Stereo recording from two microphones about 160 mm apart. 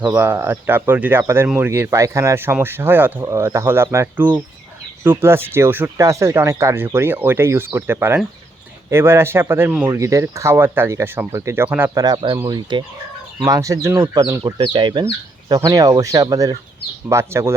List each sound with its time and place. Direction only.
0.1 s speech: 15° right (ahead or behind)
12.0 s speech: 25° right (ahead or behind)